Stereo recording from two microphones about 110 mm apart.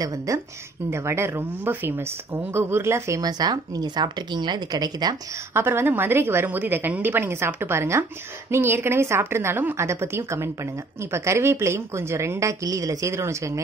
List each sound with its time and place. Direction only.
0.3 s a woman's voice: 30° right (ahead or behind)
5.5 s a woman's voice: 20° right (ahead or behind)